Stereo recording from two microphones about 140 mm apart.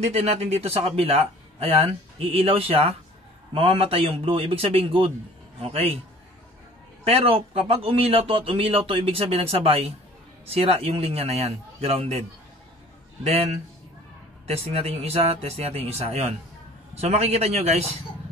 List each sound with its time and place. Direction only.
0.0 s speech: 50° right (ahead or behind)
7.1 s speech: 45° right (ahead or behind)